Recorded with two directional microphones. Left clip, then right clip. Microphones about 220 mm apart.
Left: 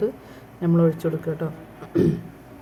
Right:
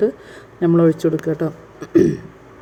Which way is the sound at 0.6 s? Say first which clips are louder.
Right 7 dB; 30° right (ahead or behind).